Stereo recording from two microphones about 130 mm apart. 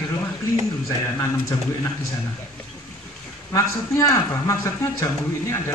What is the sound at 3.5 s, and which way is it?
A man's voice, 25° left (ahead or behind).